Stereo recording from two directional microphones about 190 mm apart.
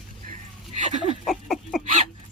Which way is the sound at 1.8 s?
40° right (ahead or behind).